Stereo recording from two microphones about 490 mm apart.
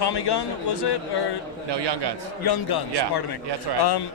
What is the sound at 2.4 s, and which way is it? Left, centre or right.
Speech, left.